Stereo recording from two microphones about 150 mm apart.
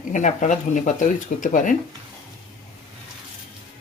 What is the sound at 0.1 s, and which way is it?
Speech, 55° left (ahead or behind).